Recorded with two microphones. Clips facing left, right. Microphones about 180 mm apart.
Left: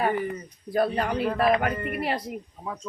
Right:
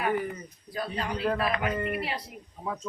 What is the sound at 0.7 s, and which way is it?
Speech, 55° left (ahead or behind).